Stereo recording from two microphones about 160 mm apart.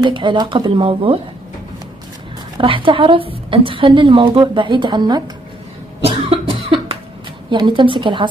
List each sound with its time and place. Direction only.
0.0 s a woman's voice: 30° right (ahead or behind)
2.5 s a woman's voice: 30° right (ahead or behind)
6.0 s cough: 35° right (ahead or behind)
7.5 s a woman's voice: 30° right (ahead or behind)